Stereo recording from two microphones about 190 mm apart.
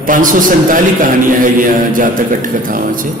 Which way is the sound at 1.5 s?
45° right (ahead or behind).